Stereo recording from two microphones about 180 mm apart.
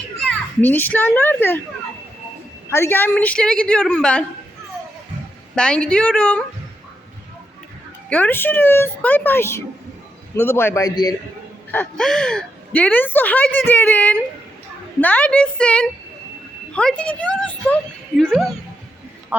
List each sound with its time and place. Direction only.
0.2 s a child's voice: 5° left (ahead or behind)
2.6 s a woman's voice: 15° left (ahead or behind)
5.5 s a woman's voice: 5° left (ahead or behind)
8.1 s a woman's voice: 10° left (ahead or behind)
11.7 s a woman's voice: 5° left (ahead or behind)
19.3 s a man's voice: 10° right (ahead or behind)